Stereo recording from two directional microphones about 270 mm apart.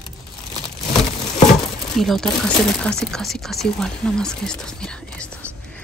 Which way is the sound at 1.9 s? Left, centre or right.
Centre.